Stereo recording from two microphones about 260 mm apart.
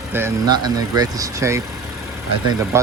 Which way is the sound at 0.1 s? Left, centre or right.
Centre.